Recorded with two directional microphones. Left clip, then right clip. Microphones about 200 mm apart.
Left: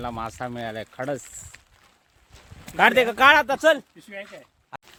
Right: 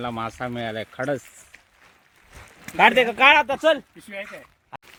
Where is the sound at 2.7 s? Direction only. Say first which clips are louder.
Right 1 dB; 15° left (ahead or behind).